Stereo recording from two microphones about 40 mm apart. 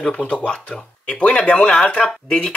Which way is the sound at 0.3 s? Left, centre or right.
Left.